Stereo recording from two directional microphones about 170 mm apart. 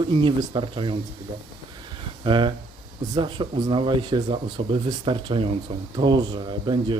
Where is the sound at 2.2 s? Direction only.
30° right (ahead or behind).